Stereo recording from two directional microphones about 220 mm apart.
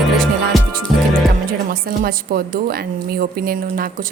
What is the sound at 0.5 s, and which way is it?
Music, centre (ahead or behind).